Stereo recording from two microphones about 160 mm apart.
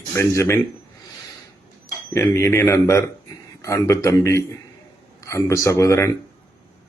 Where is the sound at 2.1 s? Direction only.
15° left (ahead or behind).